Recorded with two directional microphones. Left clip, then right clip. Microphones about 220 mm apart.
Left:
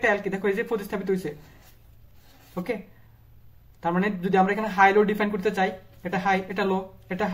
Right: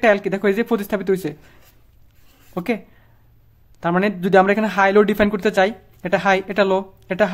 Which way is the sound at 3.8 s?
40° right (ahead or behind).